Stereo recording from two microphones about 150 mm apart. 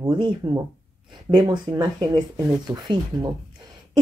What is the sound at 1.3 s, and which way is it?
Speech, 30° right (ahead or behind).